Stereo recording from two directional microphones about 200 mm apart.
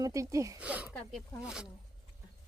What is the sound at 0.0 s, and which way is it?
Speech, 15° right (ahead or behind).